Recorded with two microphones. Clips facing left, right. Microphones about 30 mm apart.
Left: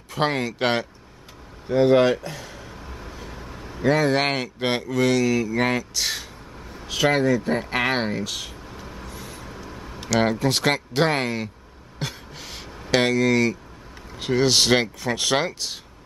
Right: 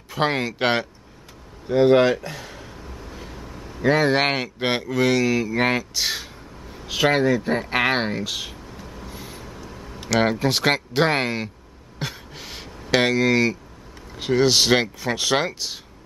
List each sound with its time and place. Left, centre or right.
0.1 s speech: centre
3.1 s vehicle: centre
3.5 s vehicle: centre
3.8 s speech: centre
8.7 s vehicle: centre
9.1 s vehicle: centre
9.4 s vehicle: centre
10.0 s speech: centre
12.0 s a sound: centre
12.9 s speech: centre
14.1 s speech: centre